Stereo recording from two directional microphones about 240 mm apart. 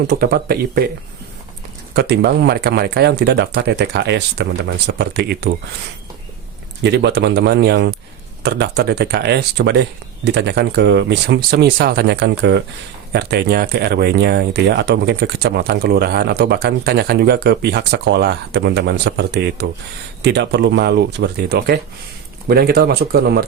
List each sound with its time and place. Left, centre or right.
0.1 s speech: right
1.9 s speech: right
6.8 s speech: right